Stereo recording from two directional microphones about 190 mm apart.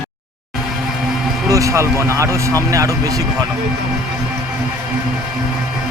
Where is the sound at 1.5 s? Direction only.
15° right (ahead or behind).